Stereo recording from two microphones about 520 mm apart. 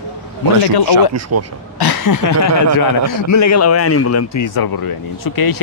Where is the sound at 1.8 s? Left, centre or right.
Left.